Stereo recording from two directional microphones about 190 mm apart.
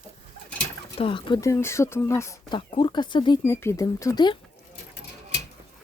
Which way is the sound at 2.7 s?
25° left (ahead or behind).